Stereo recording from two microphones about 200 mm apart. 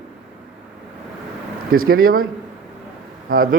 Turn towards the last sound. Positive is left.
turn(degrees=-45)  # may be behind; listen again after turning